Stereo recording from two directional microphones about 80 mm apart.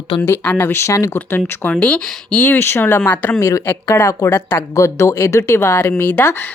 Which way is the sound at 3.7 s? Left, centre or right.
Left.